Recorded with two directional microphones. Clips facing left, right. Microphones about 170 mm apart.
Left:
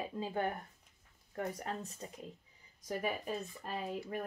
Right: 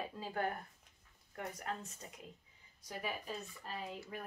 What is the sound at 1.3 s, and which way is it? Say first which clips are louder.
Speech: left 4 dB; 30° left (ahead or behind).